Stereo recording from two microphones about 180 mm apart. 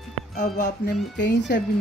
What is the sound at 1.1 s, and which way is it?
Speech, 75° left (ahead or behind).